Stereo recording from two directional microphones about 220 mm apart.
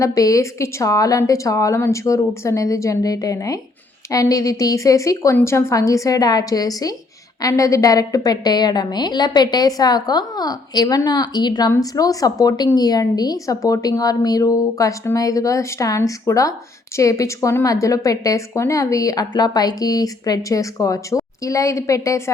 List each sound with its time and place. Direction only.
0.0 s a woman's voice: 15° left (ahead or behind)